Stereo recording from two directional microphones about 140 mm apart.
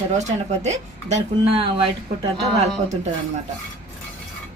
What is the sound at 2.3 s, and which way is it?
Speech, 5° left (ahead or behind).